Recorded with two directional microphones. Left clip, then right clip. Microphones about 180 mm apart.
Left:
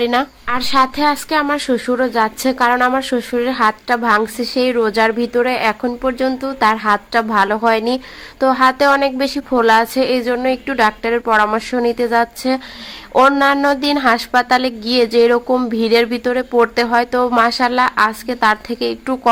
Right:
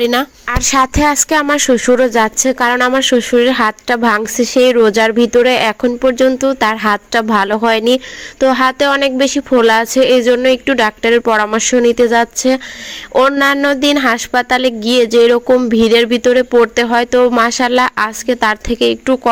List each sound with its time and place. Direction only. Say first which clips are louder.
0.0 s speech: right 2 dB; 25° right (ahead or behind)
0.4 s speech: right 3 dB; 35° right (ahead or behind)